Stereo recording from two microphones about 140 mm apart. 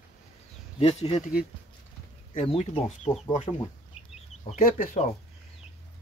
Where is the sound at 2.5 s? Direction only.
45° left (ahead or behind).